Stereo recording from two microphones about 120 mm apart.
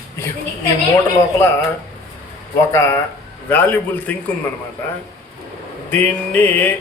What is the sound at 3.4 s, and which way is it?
Speech, 15° left (ahead or behind).